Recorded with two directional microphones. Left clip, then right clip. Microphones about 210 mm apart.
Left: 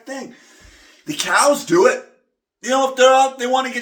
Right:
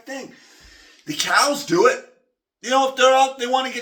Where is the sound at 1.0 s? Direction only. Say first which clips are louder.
Left 3 dB; 15° left (ahead or behind).